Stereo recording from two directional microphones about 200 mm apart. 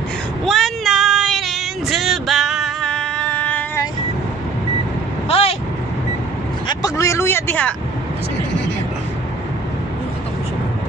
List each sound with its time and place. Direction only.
0.5 s child singing: centre (ahead or behind)
5.3 s vehicle: 30° left (ahead or behind)
6.7 s vehicle: 15° left (ahead or behind)